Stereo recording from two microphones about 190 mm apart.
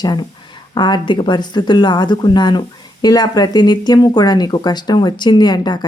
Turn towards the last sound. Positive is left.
turn(degrees=20)  # may be behind; listen again after turning